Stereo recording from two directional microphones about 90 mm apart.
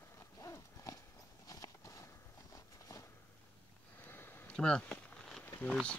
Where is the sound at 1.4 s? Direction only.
45° left (ahead or behind).